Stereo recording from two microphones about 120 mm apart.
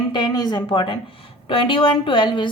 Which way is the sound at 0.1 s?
35° left (ahead or behind).